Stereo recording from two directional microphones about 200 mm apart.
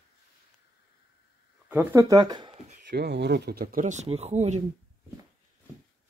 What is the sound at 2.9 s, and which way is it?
Speech, 55° right (ahead or behind).